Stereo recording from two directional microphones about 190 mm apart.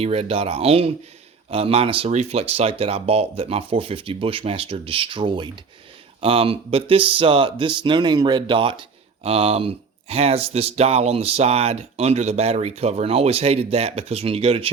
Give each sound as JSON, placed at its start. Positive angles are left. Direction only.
{"t": 0.0, "sound": "speech", "side_deg": -30}